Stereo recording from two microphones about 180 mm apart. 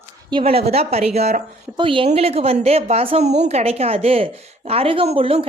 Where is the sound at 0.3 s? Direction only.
30° right (ahead or behind).